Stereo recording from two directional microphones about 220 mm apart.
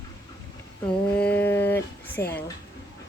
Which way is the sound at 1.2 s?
10° left (ahead or behind).